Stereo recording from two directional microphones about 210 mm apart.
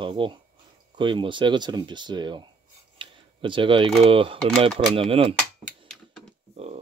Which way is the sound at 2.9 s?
25° right (ahead or behind).